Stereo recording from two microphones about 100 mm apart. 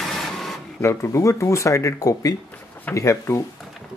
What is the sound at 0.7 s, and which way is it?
Speech, 30° left (ahead or behind).